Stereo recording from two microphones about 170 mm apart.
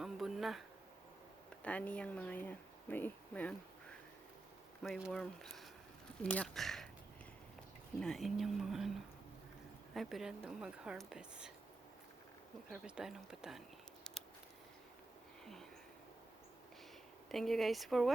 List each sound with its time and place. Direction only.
0.0 s a sound: centre (ahead or behind)
1.6 s speech: 10° left (ahead or behind)
4.8 s a woman's voice: centre (ahead or behind)
7.9 s a woman's voice: centre (ahead or behind)
9.9 s a woman's voice: centre (ahead or behind)
12.7 s a woman's voice: 5° right (ahead or behind)
14.0 s a sound: 5° left (ahead or behind)
17.2 s a woman's voice: centre (ahead or behind)